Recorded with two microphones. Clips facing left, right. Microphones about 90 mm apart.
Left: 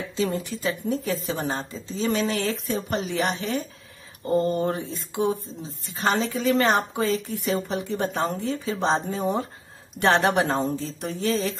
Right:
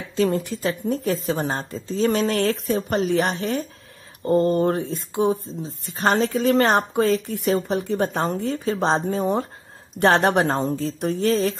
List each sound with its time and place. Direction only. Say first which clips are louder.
0.1 s a woman's voice: right 6 dB; 45° right (ahead or behind)